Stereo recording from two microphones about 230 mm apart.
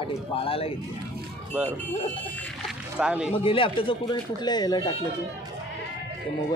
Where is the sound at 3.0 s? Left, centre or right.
Centre.